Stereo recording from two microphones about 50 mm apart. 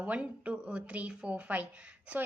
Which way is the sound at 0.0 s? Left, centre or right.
Right.